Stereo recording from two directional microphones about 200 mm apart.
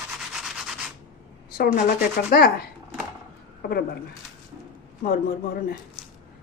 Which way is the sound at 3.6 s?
50° left (ahead or behind).